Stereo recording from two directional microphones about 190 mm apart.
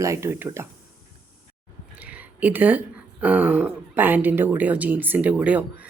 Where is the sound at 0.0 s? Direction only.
15° right (ahead or behind).